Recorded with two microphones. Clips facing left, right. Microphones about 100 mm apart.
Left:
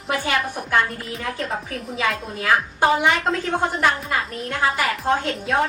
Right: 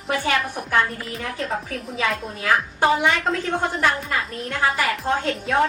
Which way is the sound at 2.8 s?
20° left (ahead or behind).